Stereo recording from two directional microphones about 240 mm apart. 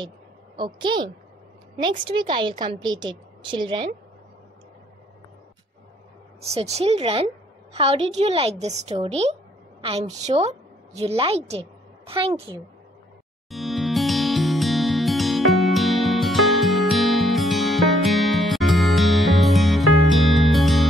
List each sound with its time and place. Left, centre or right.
0.6 s a woman's voice: centre
6.4 s a woman's voice: right
13.5 s music: centre